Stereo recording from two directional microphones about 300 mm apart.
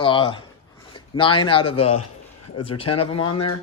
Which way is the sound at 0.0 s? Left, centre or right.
Centre.